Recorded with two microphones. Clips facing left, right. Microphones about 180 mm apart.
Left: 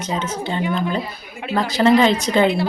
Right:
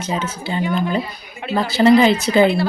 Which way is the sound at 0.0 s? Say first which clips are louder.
Even; 5° right (ahead or behind).